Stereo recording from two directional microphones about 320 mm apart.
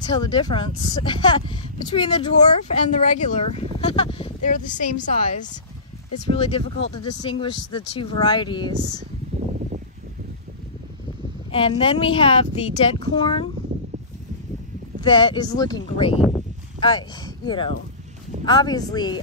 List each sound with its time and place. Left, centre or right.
0.0 s speech: centre
11.5 s speech: centre
15.0 s speech: centre
16.3 s a sound: centre
17.5 s speech: centre